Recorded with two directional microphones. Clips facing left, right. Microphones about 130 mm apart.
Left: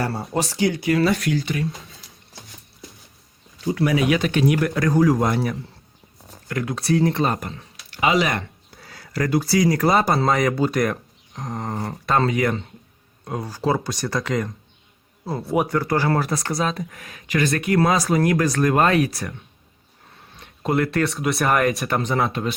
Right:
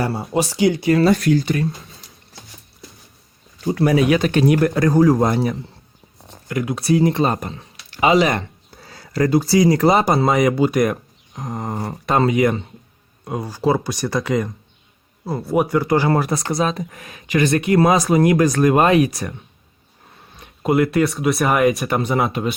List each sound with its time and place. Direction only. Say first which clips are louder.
0.3 s speech: right 5 dB; 20° right (ahead or behind)
1.2 s speech: right 6 dB; 40° right (ahead or behind)
3.7 s speech: right 4 dB; 40° right (ahead or behind)
6.5 s speech: right 3 dB; 10° right (ahead or behind)
10.2 s speech: right 4 dB; 10° right (ahead or behind)
11.8 s speech: right 3 dB; 20° right (ahead or behind); by 15.8 s 5° right (ahead or behind)
16.0 s speech: right 3 dB; 20° right (ahead or behind)
20.3 s speech: right 4 dB; 10° right (ahead or behind)